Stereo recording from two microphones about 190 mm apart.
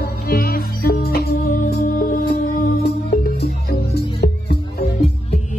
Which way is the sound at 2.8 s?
55° left (ahead or behind).